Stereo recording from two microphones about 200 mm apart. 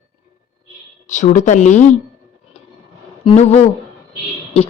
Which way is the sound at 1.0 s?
40° left (ahead or behind).